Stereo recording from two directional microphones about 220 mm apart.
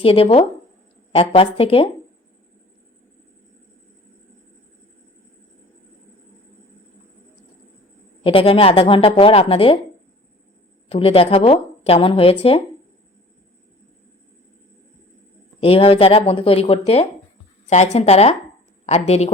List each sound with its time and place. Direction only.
0.0 s speech: 25° left (ahead or behind)
8.2 s speech: 25° left (ahead or behind)
10.8 s speech: 25° left (ahead or behind)
15.6 s speech: 25° left (ahead or behind)